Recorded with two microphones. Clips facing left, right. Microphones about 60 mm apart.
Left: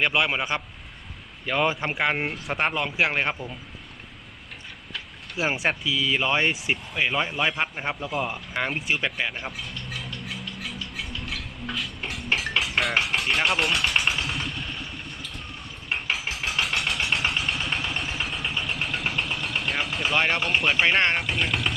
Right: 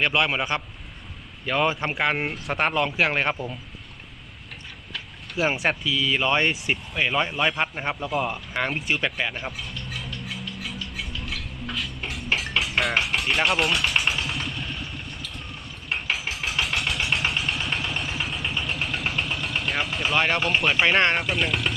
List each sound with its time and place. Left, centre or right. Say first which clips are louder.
0.0 s a man's voice: right 1 dB; centre
1.8 s speech: right 1 dB; centre
2.7 s speech: right 2 dB; centre
3.1 s speech: right 2 dB; centre
5.4 s a man's voice: right 2 dB; centre
7.1 s speech: right 3 dB; centre
9.4 s a sound: right 1 dB; centre
13.1 s speech: right 1 dB; centre
14.3 s vehicle: even; centre
20.4 s speech: right 1 dB; centre